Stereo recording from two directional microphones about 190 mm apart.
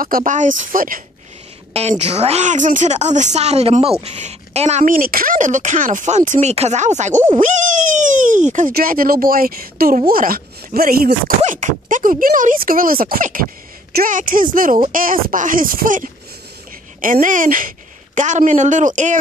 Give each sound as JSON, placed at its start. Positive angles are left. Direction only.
{"t": 0.0, "sound": "speech", "side_deg": -45}
{"t": 1.7, "sound": "a woman's voice", "side_deg": -35}